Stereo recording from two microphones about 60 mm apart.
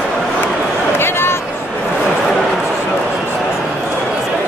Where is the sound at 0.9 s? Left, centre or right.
Left.